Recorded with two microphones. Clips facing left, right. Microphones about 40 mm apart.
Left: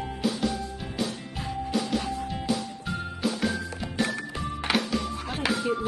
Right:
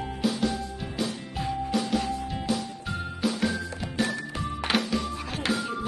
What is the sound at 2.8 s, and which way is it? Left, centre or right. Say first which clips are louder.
Music: even; centre.